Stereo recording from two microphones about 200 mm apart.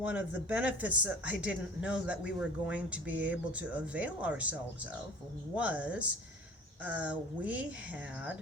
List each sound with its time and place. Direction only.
0.0 s speech: 10° right (ahead or behind)
5.5 s speech: 5° right (ahead or behind)